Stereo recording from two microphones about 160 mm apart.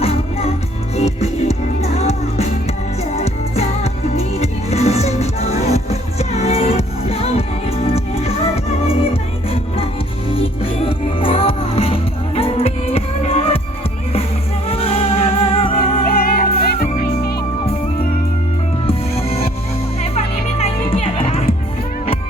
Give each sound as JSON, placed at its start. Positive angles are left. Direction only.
{"t": 0.0, "sound": "music", "side_deg": 40}
{"t": 10.3, "sound": "music", "side_deg": 35}
{"t": 14.7, "sound": "music", "side_deg": 40}
{"t": 16.0, "sound": "music", "side_deg": 70}
{"t": 18.9, "sound": "music", "side_deg": 40}
{"t": 20.6, "sound": "music", "side_deg": 35}